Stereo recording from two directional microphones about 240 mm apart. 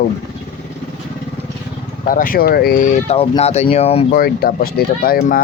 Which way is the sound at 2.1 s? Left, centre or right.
Left.